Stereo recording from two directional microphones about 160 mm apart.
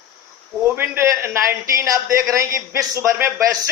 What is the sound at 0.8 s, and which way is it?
A man's voice, 15° right (ahead or behind).